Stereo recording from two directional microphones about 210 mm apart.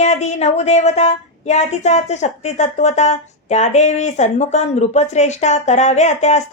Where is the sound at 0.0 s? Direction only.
30° left (ahead or behind).